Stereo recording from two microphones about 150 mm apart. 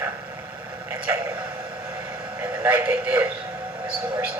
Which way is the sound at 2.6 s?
10° right (ahead or behind).